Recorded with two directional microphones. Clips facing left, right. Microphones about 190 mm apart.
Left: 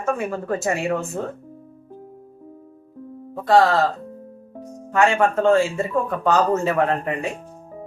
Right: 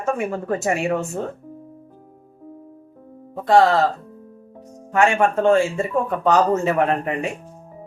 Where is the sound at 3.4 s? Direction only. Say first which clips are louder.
Right 1 dB; 20° right (ahead or behind).